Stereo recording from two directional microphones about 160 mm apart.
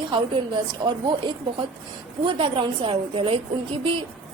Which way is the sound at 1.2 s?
30° right (ahead or behind).